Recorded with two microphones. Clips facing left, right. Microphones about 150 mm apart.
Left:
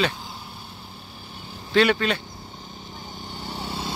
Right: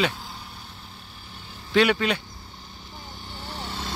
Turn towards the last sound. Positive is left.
turn(degrees=10)  # may be behind; listen again after turning